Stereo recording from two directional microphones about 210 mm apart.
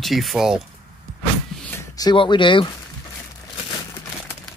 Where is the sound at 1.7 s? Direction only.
20° left (ahead or behind).